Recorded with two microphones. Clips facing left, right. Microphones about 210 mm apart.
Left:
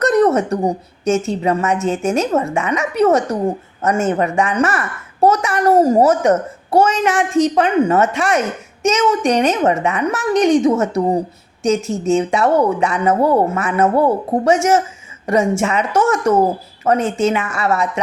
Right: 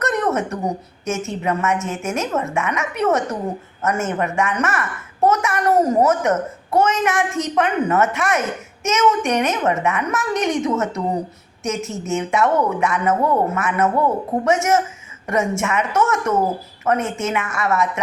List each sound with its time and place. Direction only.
0.0 s a woman's voice: 35° left (ahead or behind)